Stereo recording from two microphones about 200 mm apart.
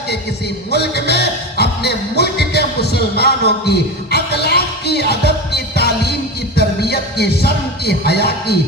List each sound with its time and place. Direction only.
0.7 s music: 55° left (ahead or behind)